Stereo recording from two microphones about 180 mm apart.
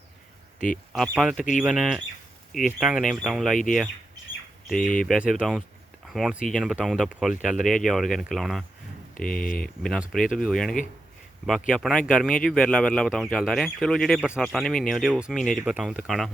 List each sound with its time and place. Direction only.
0.9 s speech: centre (ahead or behind)
4.7 s speech: centre (ahead or behind)
9.1 s speech: 50° left (ahead or behind)
9.6 s speech: centre (ahead or behind)